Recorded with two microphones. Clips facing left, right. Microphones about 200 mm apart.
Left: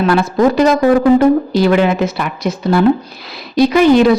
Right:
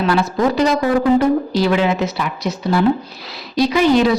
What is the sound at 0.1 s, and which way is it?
A woman's voice, 55° left (ahead or behind).